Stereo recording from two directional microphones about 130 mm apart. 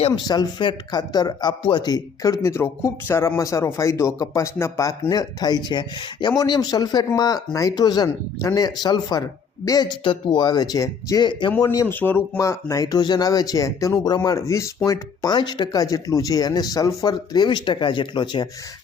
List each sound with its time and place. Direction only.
0.3 s speech: 35° left (ahead or behind)
11.9 s speech: 15° left (ahead or behind); by 18.4 s 35° left (ahead or behind)